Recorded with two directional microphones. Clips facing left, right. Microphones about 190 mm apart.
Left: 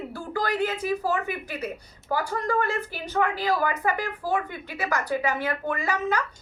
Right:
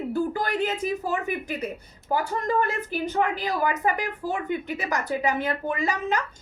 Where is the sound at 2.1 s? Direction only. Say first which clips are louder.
Right 1 dB; 20° right (ahead or behind).